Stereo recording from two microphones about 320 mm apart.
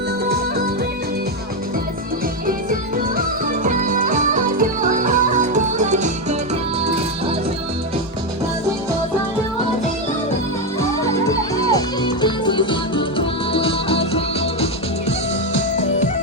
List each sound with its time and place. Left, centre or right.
3.2 s music: right
11.5 s music: centre
15.5 s music: left